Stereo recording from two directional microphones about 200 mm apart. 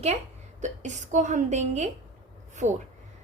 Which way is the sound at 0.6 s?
35° right (ahead or behind).